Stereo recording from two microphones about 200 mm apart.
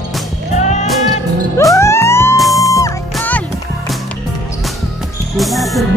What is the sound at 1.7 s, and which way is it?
Music, 15° left (ahead or behind).